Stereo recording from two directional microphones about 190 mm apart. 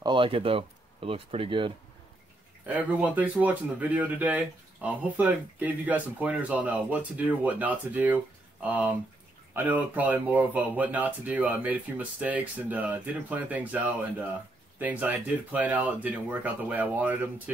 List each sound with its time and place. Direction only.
0.0 s speech: 25° right (ahead or behind)
2.6 s speech: 5° right (ahead or behind)